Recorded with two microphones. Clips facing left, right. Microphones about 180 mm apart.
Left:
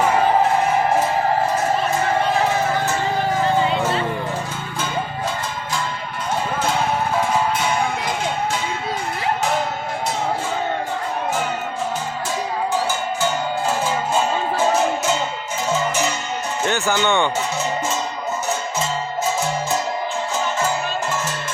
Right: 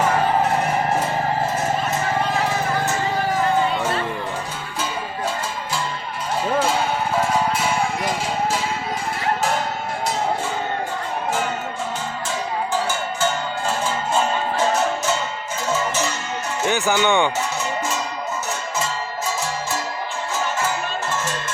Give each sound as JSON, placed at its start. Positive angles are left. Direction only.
{"t": 3.4, "sound": "music", "side_deg": 25}
{"t": 16.6, "sound": "speech", "side_deg": -15}